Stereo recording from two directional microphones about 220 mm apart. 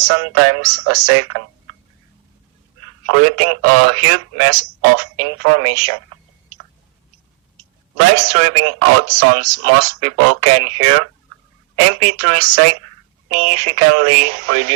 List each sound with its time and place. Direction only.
0.1 s speech: 90° right
3.1 s speech: 90° right
7.9 s speech: 90° right